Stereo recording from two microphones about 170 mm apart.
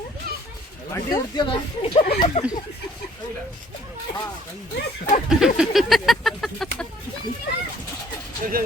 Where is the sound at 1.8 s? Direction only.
30° left (ahead or behind).